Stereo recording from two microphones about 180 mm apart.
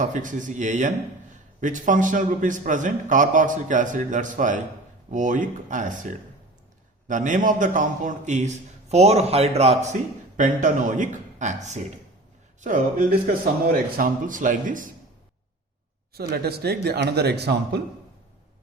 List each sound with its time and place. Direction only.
0.0 s a man's voice: 45° right (ahead or behind)
7.1 s a man's voice: 45° right (ahead or behind)
16.1 s speech: 60° right (ahead or behind)